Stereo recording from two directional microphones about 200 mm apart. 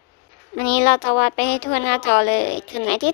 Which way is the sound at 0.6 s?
55° left (ahead or behind).